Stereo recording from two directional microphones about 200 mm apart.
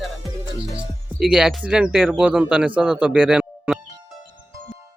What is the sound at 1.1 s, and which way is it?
Speech, 5° right (ahead or behind).